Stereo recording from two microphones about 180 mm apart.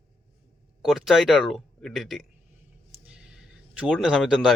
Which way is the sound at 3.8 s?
5° right (ahead or behind).